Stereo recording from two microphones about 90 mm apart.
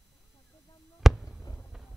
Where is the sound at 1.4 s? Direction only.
35° left (ahead or behind).